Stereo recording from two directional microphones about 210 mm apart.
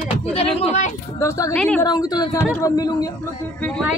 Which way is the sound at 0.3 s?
30° left (ahead or behind).